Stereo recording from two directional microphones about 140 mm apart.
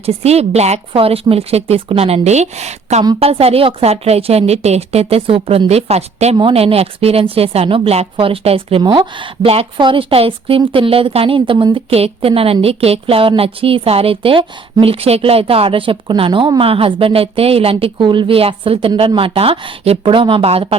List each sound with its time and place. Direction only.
0.0 s a woman's voice: 45° right (ahead or behind)
11.9 s a woman's voice: 45° right (ahead or behind)